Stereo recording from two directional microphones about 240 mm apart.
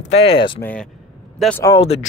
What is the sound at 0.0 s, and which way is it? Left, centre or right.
Speech, left.